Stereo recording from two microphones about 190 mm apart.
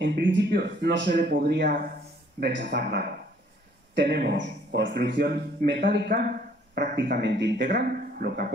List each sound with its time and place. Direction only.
0.0 s speech: 70° right (ahead or behind)